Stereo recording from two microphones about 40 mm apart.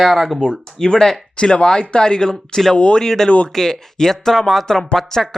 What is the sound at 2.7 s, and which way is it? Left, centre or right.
Speech, left.